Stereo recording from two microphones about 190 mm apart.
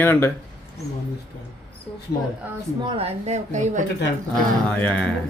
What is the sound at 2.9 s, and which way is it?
Speech, 35° right (ahead or behind).